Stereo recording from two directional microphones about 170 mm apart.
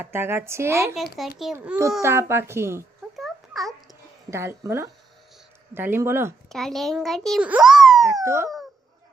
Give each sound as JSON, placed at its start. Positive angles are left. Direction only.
{"t": 0.0, "sound": "a child's voice", "side_deg": -15}
{"t": 1.2, "sound": "a child's voice", "side_deg": 0}
{"t": 1.5, "sound": "a child's voice", "side_deg": -10}
{"t": 3.2, "sound": "a sound", "side_deg": 0}
{"t": 4.3, "sound": "a child's voice", "side_deg": -15}
{"t": 6.5, "sound": "a child's voice", "side_deg": 0}
{"t": 8.2, "sound": "dog", "side_deg": -15}